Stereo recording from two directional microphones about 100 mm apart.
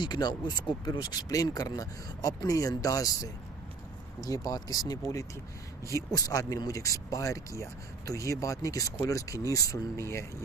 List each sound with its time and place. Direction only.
0.0 s speech: 45° left (ahead or behind); by 10.2 s 30° left (ahead or behind)